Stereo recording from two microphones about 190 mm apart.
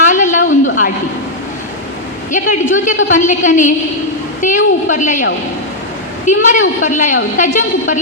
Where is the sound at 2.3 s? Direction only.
40° left (ahead or behind).